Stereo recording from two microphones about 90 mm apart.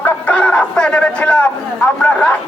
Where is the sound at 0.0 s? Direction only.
15° left (ahead or behind).